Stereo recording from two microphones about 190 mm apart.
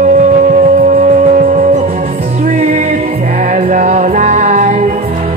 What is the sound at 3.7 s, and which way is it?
Music, 40° right (ahead or behind).